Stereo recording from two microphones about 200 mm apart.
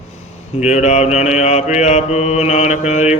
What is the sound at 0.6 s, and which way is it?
Mantra, 35° left (ahead or behind).